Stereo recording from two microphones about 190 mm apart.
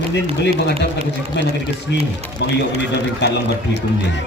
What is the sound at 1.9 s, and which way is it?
A man's voice, 70° left (ahead or behind).